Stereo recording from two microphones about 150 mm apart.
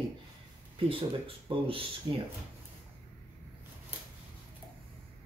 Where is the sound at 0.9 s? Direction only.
40° right (ahead or behind).